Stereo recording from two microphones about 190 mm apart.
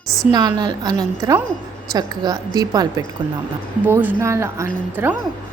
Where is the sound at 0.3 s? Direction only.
20° right (ahead or behind).